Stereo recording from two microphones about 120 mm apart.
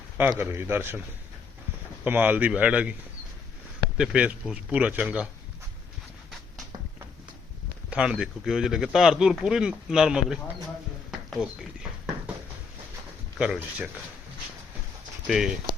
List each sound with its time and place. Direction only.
0.2 s a man's voice: 20° right (ahead or behind)
2.0 s speech: 15° right (ahead or behind)
3.9 s speech: 10° right (ahead or behind)
7.9 s speech: 10° right (ahead or behind)
11.3 s a sound: 5° right (ahead or behind)
13.4 s speech: 10° right (ahead or behind)
15.3 s speech: 5° right (ahead or behind)